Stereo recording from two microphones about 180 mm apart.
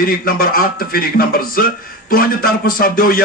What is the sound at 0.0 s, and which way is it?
A man's voice, 50° left (ahead or behind).